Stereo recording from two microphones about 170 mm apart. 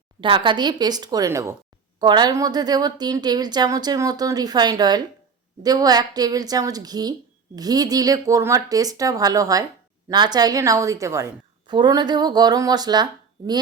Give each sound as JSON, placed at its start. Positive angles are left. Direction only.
{"t": 0.2, "sound": "a woman's voice", "side_deg": -30}